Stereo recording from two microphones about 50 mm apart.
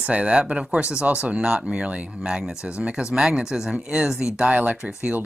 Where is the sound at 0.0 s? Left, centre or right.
Right.